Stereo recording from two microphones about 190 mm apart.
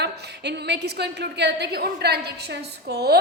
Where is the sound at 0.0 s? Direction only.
60° right (ahead or behind).